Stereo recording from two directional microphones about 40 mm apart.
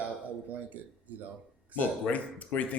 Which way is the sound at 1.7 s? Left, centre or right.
Left.